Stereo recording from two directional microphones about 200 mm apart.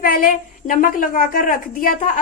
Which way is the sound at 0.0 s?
45° left (ahead or behind).